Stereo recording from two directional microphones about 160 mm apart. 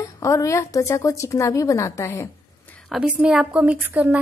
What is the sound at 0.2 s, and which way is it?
A woman's voice, 20° left (ahead or behind).